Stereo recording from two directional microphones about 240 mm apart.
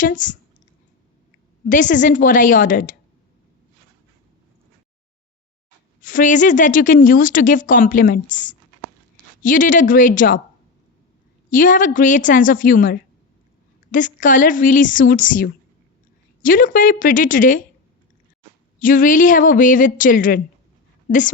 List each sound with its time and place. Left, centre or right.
0.0 s a woman's voice: left
1.6 s a woman's voice: left
6.0 s a woman's voice: left
11.5 s a woman's voice: left
18.8 s a woman's voice: left